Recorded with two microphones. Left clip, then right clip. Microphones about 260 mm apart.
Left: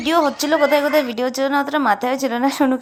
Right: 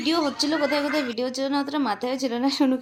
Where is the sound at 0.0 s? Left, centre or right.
Centre.